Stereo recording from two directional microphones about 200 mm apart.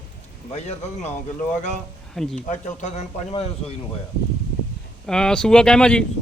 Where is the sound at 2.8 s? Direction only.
35° left (ahead or behind).